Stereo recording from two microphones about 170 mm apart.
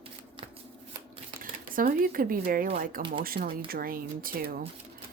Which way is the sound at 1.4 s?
55° right (ahead or behind).